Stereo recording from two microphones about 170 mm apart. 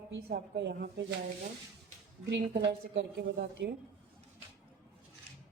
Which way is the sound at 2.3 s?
90° right.